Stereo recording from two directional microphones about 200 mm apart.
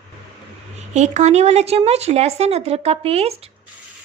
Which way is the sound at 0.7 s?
35° right (ahead or behind).